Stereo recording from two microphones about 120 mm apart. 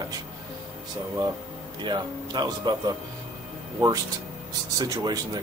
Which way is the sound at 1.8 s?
40° right (ahead or behind).